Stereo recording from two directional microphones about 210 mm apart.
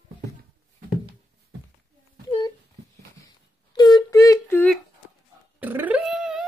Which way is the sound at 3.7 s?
20° left (ahead or behind).